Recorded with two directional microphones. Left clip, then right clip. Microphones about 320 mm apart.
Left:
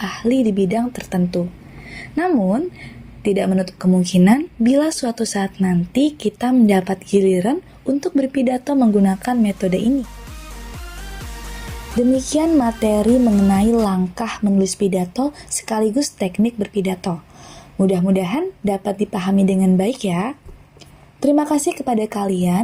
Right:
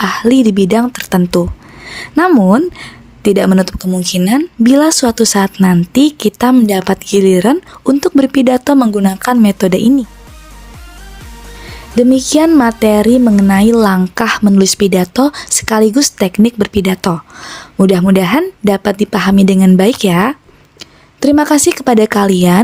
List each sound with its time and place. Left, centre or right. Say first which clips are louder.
0.0 s speech: right 9 dB; right
11.9 s speech: right 8 dB; right